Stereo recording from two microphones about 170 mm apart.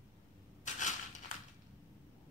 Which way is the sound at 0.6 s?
45° left (ahead or behind).